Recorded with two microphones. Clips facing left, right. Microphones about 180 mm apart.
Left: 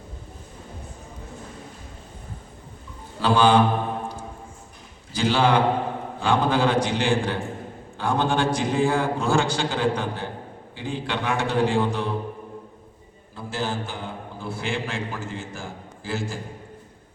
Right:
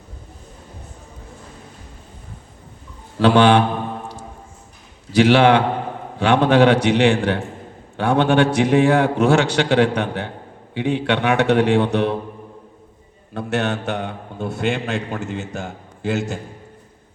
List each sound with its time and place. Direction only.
3.2 s a man's voice: 70° right (ahead or behind)
5.1 s a man's voice: 70° right (ahead or behind)
13.3 s a man's voice: 70° right (ahead or behind)